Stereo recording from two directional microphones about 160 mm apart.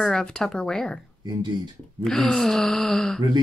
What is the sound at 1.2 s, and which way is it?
Speech, 25° right (ahead or behind).